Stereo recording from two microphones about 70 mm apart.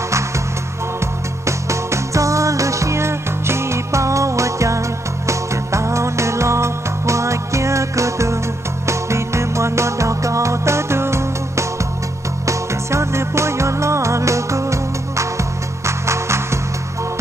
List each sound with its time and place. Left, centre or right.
1.4 s music: right